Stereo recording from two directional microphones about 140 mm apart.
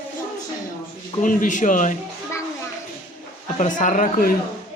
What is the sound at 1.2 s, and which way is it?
Speech, 65° left (ahead or behind).